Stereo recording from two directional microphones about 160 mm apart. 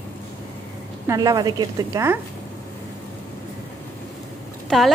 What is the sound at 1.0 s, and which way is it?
Speech, 25° right (ahead or behind).